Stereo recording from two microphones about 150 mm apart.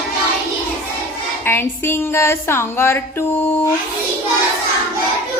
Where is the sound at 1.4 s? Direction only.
15° left (ahead or behind).